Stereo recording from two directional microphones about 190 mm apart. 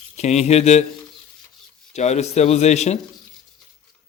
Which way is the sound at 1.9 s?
35° left (ahead or behind).